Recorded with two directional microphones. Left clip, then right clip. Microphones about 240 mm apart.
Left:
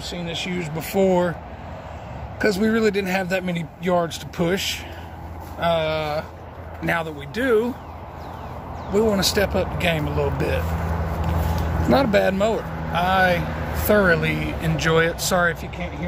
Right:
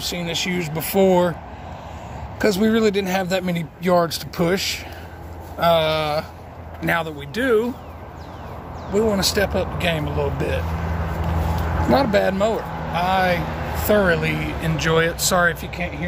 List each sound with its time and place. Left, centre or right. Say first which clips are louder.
0.0 s speech: right 4 dB; right
2.3 s a man's voice: right 2 dB; centre
8.9 s speech: even; centre